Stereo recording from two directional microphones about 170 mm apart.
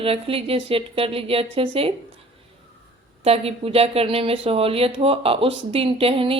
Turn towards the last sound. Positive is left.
turn(degrees=-35)  # may be behind; listen again after turning